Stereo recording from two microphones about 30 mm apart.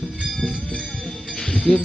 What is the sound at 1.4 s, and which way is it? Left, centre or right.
Music, centre.